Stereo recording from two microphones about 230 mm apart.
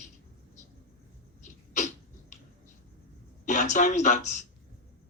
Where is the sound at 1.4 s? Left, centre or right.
Left.